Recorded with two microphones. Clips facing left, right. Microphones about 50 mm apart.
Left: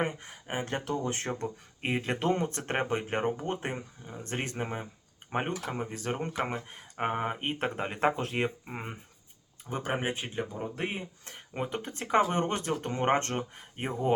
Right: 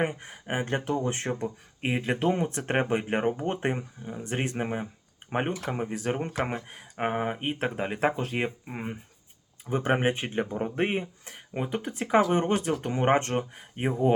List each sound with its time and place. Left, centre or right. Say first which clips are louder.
0.0 s speech: right 3 dB; right
1.5 s speech: right 2 dB; centre
3.4 s speech: right 5 dB; right
4.0 s speech: right 5 dB; centre
9.8 s speech: right 6 dB; right
11.3 s speech: even; centre